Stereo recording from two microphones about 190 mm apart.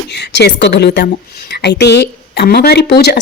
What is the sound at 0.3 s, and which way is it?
A woman's voice, 65° left (ahead or behind).